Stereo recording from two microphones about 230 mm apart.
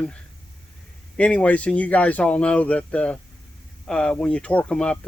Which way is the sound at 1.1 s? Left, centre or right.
Centre.